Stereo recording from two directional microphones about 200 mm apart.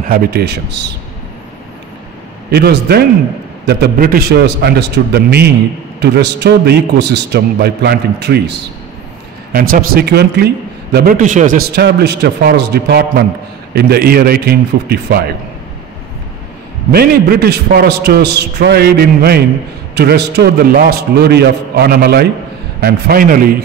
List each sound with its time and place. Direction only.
0.1 s a man's voice: 55° right (ahead or behind)
2.5 s a man's voice: 55° right (ahead or behind)
16.9 s a man's voice: 50° right (ahead or behind)